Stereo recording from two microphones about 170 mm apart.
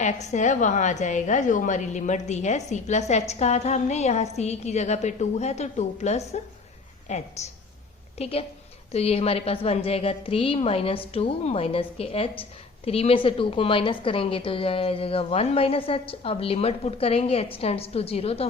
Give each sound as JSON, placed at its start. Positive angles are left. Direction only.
{"t": 0.0, "sound": "a woman's voice", "side_deg": 45}